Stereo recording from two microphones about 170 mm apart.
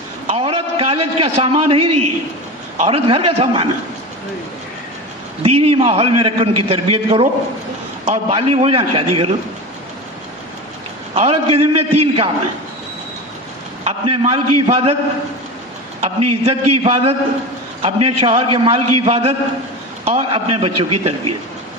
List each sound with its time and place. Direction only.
0.3 s a man's voice: 35° right (ahead or behind)
2.8 s a man's voice: 35° right (ahead or behind)
5.4 s a man's voice: 35° right (ahead or behind)
11.1 s a man's voice: 35° right (ahead or behind)
13.8 s a man's voice: 35° right (ahead or behind)
16.0 s a man's voice: 35° right (ahead or behind)